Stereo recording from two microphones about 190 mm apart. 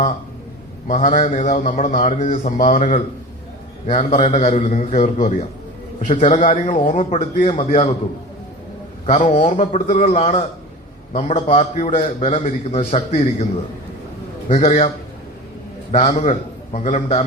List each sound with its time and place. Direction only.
0.9 s a man's voice: 40° left (ahead or behind)
6.5 s a man's voice: 35° left (ahead or behind)
9.0 s a man's voice: 40° left (ahead or behind)
14.5 s a man's voice: 35° left (ahead or behind)
15.9 s a man's voice: 35° left (ahead or behind)